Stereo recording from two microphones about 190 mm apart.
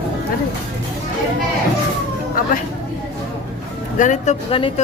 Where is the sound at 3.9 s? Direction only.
40° left (ahead or behind).